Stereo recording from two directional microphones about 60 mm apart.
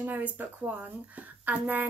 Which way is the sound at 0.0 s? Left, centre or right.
Right.